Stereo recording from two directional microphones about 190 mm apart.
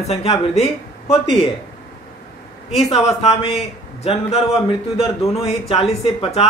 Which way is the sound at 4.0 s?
30° left (ahead or behind).